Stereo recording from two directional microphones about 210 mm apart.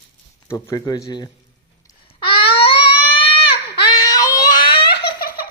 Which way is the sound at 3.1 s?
25° left (ahead or behind).